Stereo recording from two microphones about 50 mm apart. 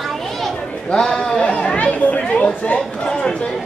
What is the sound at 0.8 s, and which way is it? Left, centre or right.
A man's voice, centre.